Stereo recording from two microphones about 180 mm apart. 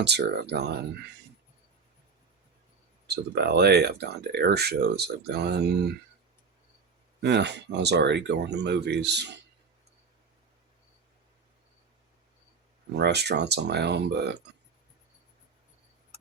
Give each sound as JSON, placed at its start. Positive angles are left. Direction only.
{"t": 0.0, "sound": "speech", "side_deg": -70}
{"t": 3.1, "sound": "a sound", "side_deg": -65}
{"t": 3.4, "sound": "speech", "side_deg": -65}
{"t": 7.2, "sound": "speech", "side_deg": -70}
{"t": 12.9, "sound": "speech", "side_deg": -70}